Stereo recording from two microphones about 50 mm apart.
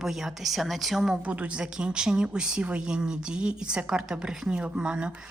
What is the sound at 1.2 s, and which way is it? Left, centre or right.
Speech, right.